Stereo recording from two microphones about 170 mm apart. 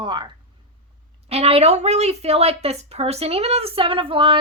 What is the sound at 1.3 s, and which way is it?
A woman's voice, 35° right (ahead or behind).